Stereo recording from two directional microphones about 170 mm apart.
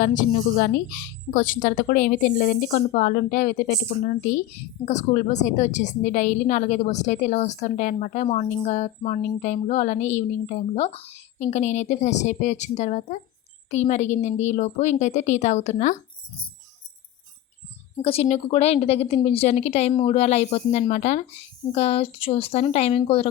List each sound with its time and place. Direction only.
0.0 s speech: 50° left (ahead or behind)
2.6 s speech: 45° left (ahead or behind)
18.0 s a woman's voice: 35° left (ahead or behind)
19.9 s speech: 25° left (ahead or behind)
20.1 s a woman's voice: 40° left (ahead or behind)